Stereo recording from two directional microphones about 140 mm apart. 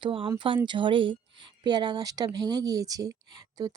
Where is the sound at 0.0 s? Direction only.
35° right (ahead or behind).